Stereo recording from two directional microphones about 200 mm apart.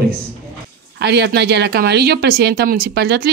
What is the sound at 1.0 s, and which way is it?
Speech, 55° right (ahead or behind).